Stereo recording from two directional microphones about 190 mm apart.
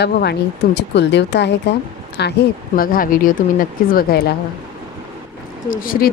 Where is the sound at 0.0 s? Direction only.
60° left (ahead or behind).